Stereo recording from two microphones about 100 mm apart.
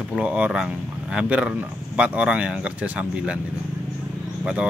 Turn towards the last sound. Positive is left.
turn(degrees=-10)  # may be behind; listen again after turning